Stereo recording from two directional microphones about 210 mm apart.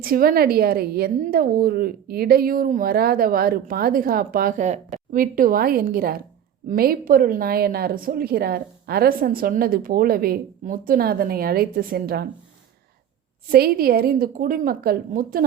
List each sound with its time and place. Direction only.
0.0 s a woman's voice: 45° right (ahead or behind)
13.5 s a woman's voice: 45° right (ahead or behind)